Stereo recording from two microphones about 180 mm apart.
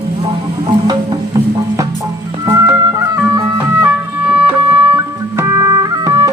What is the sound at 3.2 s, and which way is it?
Music, 10° right (ahead or behind).